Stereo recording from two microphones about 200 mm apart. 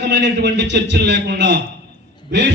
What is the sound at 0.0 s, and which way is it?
A man's voice, 60° right (ahead or behind).